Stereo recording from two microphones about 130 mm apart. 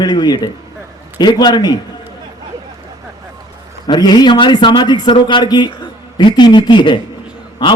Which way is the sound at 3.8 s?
35° left (ahead or behind).